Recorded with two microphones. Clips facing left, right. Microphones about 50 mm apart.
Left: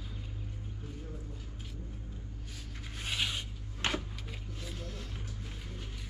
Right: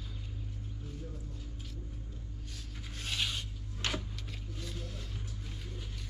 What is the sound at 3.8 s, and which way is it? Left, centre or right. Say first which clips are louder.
Wood: left 3 dB; left.